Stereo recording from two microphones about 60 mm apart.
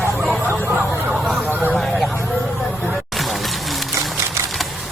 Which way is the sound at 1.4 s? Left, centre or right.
Right.